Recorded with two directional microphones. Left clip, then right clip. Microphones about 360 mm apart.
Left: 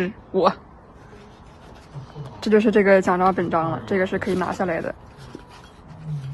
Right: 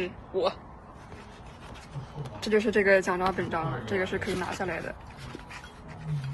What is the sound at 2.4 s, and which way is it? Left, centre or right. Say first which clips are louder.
A woman's voice: left 7 dB; left.